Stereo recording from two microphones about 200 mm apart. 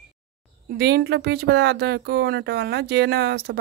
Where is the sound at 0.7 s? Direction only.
55° right (ahead or behind).